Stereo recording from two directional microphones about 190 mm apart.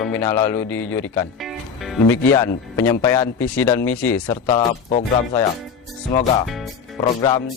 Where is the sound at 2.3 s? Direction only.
15° left (ahead or behind).